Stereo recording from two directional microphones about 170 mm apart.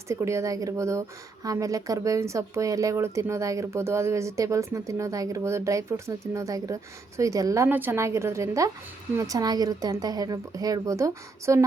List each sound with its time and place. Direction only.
0.1 s a woman's voice: 15° right (ahead or behind)